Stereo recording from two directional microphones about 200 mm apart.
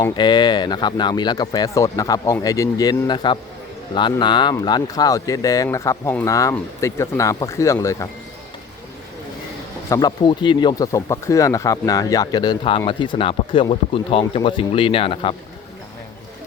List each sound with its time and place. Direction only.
0.0 s speech: 20° left (ahead or behind)
9.9 s speech: 20° left (ahead or behind)